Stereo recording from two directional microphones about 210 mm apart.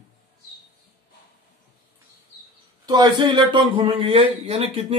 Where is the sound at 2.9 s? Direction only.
20° right (ahead or behind).